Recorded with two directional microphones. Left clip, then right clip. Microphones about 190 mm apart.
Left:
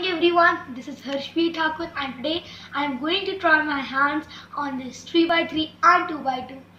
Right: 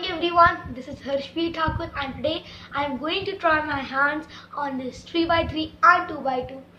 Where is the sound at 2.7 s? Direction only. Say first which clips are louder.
Left 1 dB; 15° right (ahead or behind).